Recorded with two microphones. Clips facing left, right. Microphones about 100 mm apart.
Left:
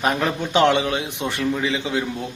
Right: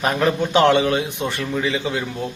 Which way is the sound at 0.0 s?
5° left (ahead or behind).